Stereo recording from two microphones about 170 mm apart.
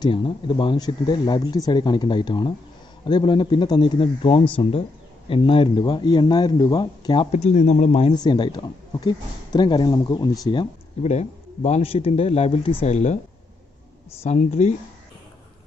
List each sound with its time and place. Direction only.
0.0 s speech: 30° left (ahead or behind)
7.3 s speech: 45° left (ahead or behind)
8.1 s speech: 25° left (ahead or behind)
11.0 s speech: 40° left (ahead or behind)
14.2 s speech: 45° left (ahead or behind)